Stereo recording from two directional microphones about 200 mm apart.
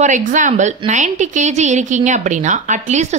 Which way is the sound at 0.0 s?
40° right (ahead or behind).